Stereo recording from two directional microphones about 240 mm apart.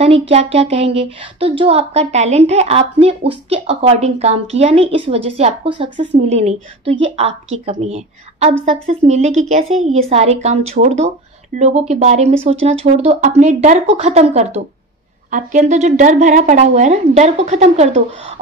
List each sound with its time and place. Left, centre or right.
0.3 s a woman's voice: right